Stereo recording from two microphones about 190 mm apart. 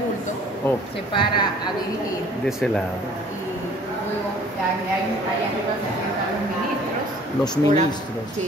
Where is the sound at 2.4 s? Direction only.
Centre (ahead or behind).